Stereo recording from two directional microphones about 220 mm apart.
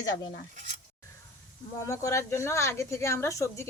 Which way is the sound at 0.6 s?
35° right (ahead or behind).